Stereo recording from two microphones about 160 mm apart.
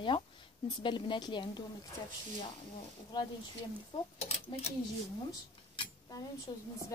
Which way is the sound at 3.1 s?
25° left (ahead or behind).